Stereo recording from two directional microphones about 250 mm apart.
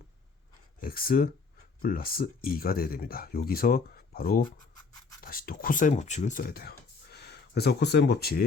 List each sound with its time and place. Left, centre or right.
0.8 s speech: left
4.7 s scratch: centre
5.2 s speech: left